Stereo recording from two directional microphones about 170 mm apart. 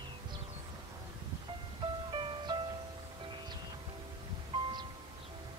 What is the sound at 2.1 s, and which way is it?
Music, 25° right (ahead or behind).